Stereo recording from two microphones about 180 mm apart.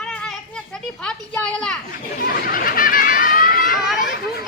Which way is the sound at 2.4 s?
55° left (ahead or behind).